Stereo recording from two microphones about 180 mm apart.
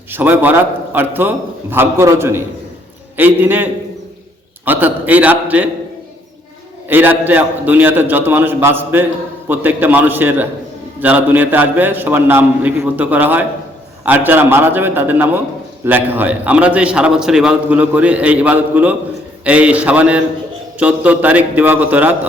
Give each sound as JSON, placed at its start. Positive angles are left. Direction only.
{"t": 0.1, "sound": "a man's voice", "side_deg": -10}
{"t": 6.8, "sound": "a man's voice", "side_deg": -10}